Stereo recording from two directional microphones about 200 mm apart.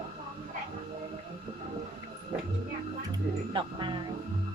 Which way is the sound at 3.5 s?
25° right (ahead or behind).